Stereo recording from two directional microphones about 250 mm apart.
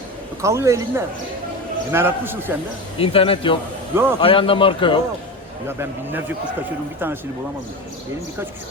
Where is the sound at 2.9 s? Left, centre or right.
Left.